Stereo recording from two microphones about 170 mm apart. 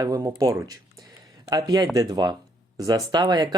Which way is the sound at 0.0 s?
20° right (ahead or behind).